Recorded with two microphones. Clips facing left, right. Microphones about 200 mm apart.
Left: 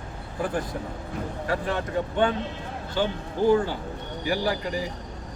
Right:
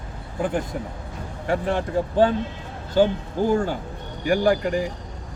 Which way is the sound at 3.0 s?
45° right (ahead or behind).